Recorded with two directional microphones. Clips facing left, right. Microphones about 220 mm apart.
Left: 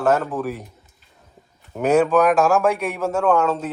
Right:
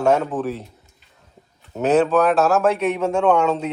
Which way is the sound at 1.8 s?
10° left (ahead or behind).